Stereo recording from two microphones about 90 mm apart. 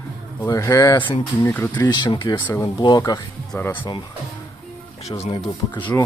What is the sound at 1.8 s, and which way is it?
Speech, 50° left (ahead or behind).